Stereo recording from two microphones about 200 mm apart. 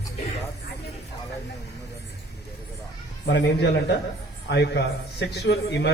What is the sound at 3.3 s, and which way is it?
A man's voice, 60° left (ahead or behind).